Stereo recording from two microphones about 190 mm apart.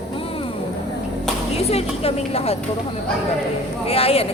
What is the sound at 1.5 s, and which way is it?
Speech, 30° left (ahead or behind).